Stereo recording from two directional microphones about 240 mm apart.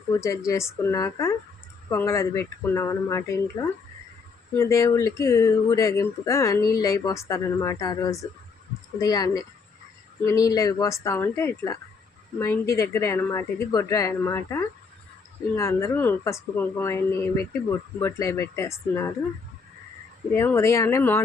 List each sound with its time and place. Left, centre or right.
0.1 s speech: centre
20.3 s speech: centre